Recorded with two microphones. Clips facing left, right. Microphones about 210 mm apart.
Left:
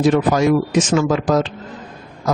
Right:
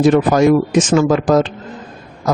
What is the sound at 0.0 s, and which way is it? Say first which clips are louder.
Speech: right 4 dB; 55° right (ahead or behind).